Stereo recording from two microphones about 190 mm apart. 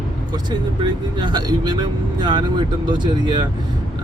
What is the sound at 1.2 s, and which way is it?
Speech, 20° right (ahead or behind).